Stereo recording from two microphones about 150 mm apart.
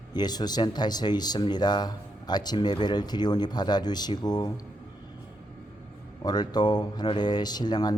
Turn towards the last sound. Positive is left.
turn(degrees=25)  # may be behind; listen again after turning